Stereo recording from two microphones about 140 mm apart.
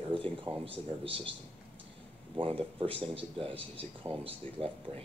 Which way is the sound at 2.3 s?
40° right (ahead or behind).